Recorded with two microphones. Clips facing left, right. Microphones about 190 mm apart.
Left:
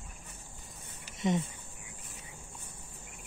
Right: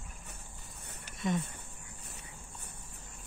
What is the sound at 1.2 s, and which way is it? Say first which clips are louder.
Speech: left 3 dB; 20° left (ahead or behind).